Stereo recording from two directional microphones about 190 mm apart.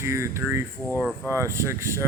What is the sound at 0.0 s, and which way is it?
Speech, 15° right (ahead or behind).